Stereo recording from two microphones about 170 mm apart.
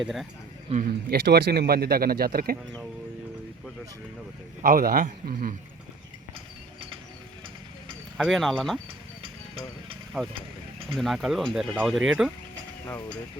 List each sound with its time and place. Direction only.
0.7 s speech: 45° right (ahead or behind)
1.1 s speech: 70° right (ahead or behind)
4.6 s speech: 55° right (ahead or behind)
8.2 s speech: centre (ahead or behind)
10.1 s speech: 5° right (ahead or behind)
12.8 s speech: 15° left (ahead or behind)